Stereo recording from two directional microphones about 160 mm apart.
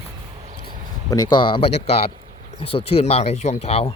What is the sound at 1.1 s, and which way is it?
Speech, 25° left (ahead or behind).